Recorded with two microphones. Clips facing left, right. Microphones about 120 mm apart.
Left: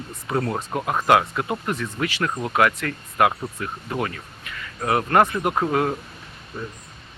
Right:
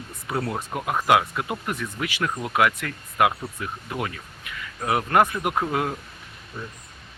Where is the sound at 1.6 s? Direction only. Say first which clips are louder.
Left 3 dB; 10° right (ahead or behind).